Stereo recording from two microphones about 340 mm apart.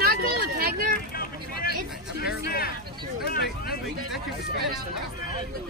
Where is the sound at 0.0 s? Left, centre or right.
Right.